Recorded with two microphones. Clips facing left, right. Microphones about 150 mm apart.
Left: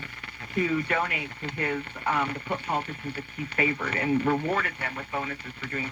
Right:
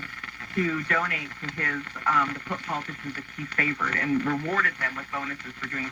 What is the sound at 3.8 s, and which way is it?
Speech, 30° left (ahead or behind).